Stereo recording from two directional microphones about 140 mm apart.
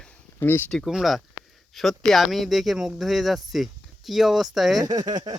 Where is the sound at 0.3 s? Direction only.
15° left (ahead or behind).